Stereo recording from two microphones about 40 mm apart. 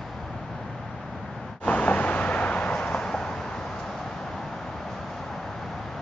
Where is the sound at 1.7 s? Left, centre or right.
Left; by 3.4 s centre.